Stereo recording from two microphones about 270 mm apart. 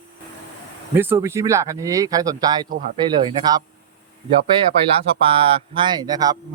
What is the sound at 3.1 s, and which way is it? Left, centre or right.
Speech, centre.